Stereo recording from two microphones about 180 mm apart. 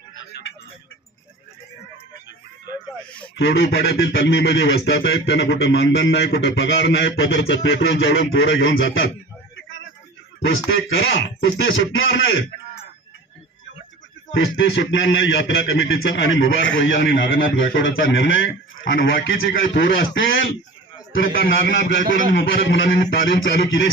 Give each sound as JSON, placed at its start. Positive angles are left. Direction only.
{"t": 3.3, "sound": "speech", "side_deg": 90}
{"t": 10.4, "sound": "speech", "side_deg": 90}
{"t": 14.3, "sound": "a man's voice", "side_deg": 90}
{"t": 21.4, "sound": "a man's voice", "side_deg": 60}
{"t": 22.0, "sound": "a man's voice", "side_deg": -50}
{"t": 22.4, "sound": "a man's voice", "side_deg": 75}